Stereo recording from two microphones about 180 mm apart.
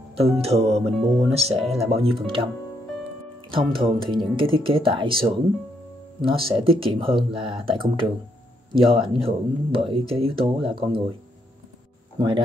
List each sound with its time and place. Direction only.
0.4 s speech: 35° right (ahead or behind)
3.5 s speech: 30° right (ahead or behind)
12.2 s speech: 30° right (ahead or behind)